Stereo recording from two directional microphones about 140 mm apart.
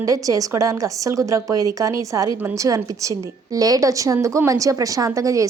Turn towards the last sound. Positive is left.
turn(degrees=-25)  # may be behind; listen again after turning